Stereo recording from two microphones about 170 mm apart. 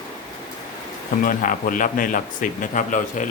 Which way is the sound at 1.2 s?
50° left (ahead or behind).